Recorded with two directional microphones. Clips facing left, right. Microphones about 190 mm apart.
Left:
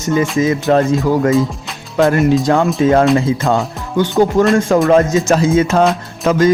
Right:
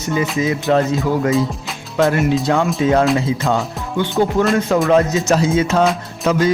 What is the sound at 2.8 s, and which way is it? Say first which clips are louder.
Music: left 4 dB; 50° left (ahead or behind).